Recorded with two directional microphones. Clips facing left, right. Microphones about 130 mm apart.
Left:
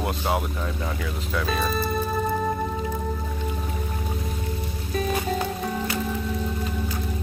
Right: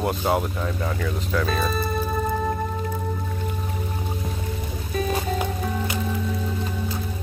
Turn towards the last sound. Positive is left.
turn(degrees=0)  # may be behind; listen again after turning